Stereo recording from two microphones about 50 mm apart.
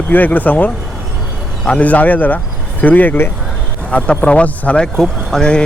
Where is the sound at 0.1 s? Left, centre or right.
Left.